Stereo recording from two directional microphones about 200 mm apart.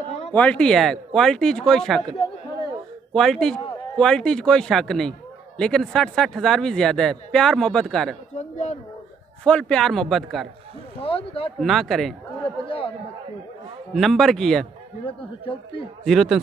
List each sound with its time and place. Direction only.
0.3 s speech: 5° left (ahead or behind)
8.4 s a sound: 35° left (ahead or behind)
9.4 s speech: 5° left (ahead or behind)
11.0 s speech: 30° left (ahead or behind)
11.6 s speech: centre (ahead or behind)
12.6 s chatter: 25° left (ahead or behind)
13.9 s speech: centre (ahead or behind)
15.0 s speech: 25° left (ahead or behind)
16.0 s speech: centre (ahead or behind)